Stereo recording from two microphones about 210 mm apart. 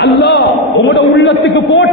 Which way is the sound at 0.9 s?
55° left (ahead or behind).